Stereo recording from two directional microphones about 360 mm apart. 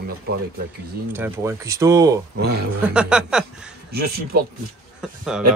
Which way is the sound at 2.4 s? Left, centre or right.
Right.